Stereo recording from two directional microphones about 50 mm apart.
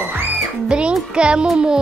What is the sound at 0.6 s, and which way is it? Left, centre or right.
Speech, centre.